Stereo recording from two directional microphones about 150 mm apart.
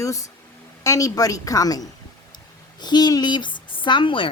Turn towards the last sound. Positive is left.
turn(degrees=35)  # may be behind; listen again after turning